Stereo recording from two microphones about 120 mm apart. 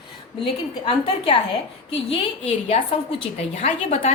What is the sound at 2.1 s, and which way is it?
A woman's voice, 60° left (ahead or behind).